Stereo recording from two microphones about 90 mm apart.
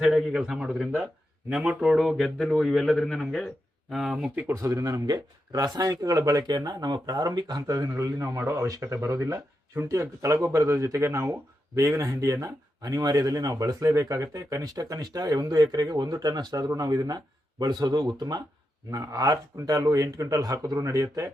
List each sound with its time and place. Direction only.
0.0 s speech: 10° right (ahead or behind)
4.5 s speech: 35° right (ahead or behind)
18.9 s speech: 40° right (ahead or behind)